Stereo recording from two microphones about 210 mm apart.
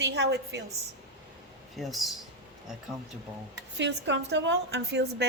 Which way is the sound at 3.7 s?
55° right (ahead or behind).